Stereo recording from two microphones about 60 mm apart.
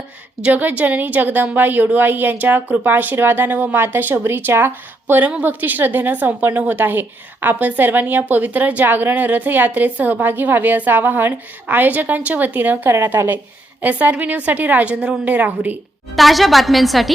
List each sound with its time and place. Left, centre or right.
0.4 s a woman's voice: right
5.2 s a woman's voice: right
16.1 s a woman's voice: centre